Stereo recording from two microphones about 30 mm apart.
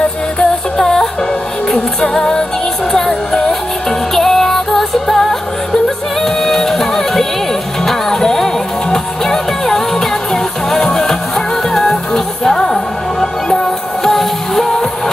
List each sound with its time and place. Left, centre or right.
0.3 s music: left